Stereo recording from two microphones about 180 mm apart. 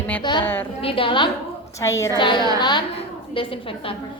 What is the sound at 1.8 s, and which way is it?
A woman's voice, 15° left (ahead or behind).